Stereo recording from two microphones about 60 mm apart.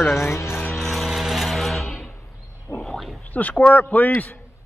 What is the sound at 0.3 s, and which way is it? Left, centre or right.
Music, left.